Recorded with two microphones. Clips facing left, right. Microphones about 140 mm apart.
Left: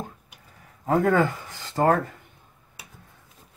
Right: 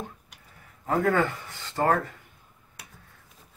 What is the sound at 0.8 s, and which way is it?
Speech, 35° left (ahead or behind).